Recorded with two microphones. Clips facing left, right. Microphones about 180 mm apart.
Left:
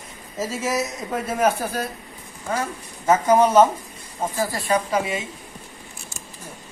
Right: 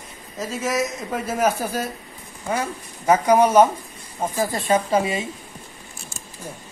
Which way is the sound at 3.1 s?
15° right (ahead or behind).